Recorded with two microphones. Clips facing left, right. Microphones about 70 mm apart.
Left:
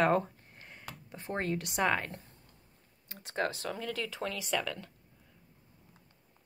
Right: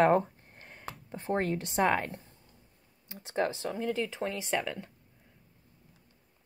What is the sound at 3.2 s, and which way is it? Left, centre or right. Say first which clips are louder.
Speech: right 3 dB; right.